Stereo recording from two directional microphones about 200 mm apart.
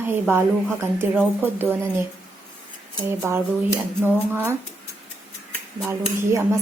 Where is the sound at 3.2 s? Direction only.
15° right (ahead or behind).